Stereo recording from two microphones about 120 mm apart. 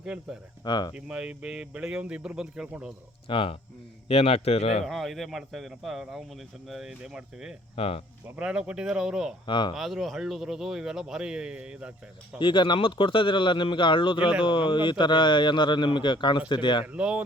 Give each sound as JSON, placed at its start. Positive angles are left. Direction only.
{"t": 0.0, "sound": "a man's voice", "side_deg": -5}
{"t": 0.6, "sound": "speech", "side_deg": 35}
{"t": 0.9, "sound": "speech", "side_deg": -10}
{"t": 3.2, "sound": "a man's voice", "side_deg": 45}
{"t": 4.8, "sound": "a man's voice", "side_deg": 0}
{"t": 7.8, "sound": "a man's voice", "side_deg": 55}
{"t": 8.4, "sound": "speech", "side_deg": -10}
{"t": 9.5, "sound": "speech", "side_deg": 40}
{"t": 9.7, "sound": "a man's voice", "side_deg": 0}
{"t": 12.4, "sound": "speech", "side_deg": 40}
{"t": 16.8, "sound": "speech", "side_deg": -10}